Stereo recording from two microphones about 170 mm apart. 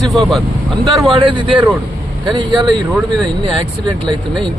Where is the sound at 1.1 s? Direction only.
30° right (ahead or behind).